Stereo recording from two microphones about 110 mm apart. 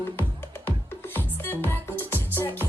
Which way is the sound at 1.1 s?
20° left (ahead or behind).